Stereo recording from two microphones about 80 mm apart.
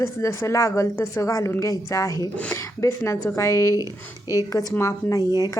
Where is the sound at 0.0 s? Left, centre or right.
Left.